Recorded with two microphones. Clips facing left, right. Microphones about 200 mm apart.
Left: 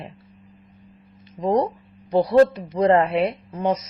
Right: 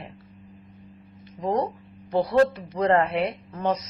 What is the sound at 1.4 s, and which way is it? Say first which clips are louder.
Speech: left 4 dB; 30° left (ahead or behind).